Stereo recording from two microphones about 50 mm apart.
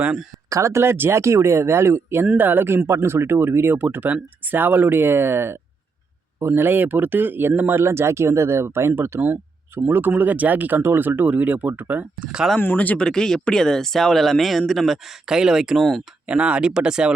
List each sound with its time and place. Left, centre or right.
0.5 s speech: right
1.2 s speech: right
2.4 s speech: right
7.8 s speech: right
9.8 s speech: right
10.8 s speech: right
12.2 s speech: centre
12.7 s speech: left
13.0 s speech: centre
15.3 s speech: centre
15.8 s speech: centre
16.2 s speech: right